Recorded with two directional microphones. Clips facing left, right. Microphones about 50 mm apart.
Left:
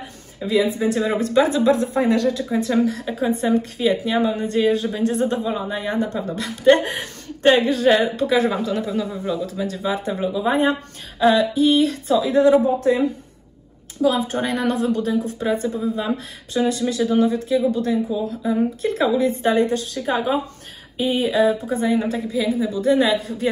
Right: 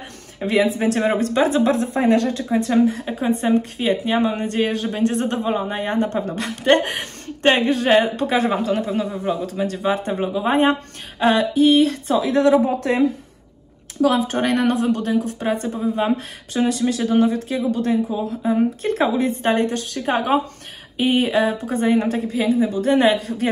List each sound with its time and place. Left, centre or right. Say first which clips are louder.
0.4 s a woman's voice: right 1 dB; right
2.7 s a woman's voice: right 3 dB; right
3.3 s a woman's voice: right 1 dB; right
12.4 s a man's voice: left 1 dB; right
14.0 s a woman's voice: right 2 dB; right